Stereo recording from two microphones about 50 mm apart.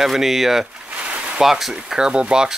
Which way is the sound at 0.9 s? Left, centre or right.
Right.